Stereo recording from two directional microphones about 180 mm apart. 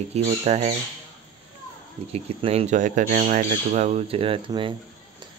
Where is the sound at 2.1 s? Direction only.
35° right (ahead or behind).